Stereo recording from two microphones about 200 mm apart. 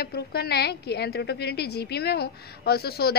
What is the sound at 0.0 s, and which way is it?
A woman's voice, 50° left (ahead or behind).